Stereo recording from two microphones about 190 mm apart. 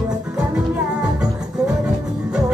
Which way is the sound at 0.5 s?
5° right (ahead or behind).